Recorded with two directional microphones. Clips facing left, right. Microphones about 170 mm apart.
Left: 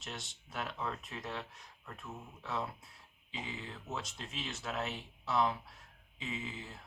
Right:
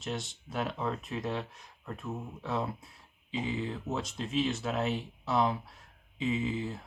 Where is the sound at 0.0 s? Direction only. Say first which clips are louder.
Right 10 dB; 30° right (ahead or behind).